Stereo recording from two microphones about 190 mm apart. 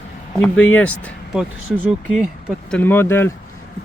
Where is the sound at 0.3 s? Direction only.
5° left (ahead or behind).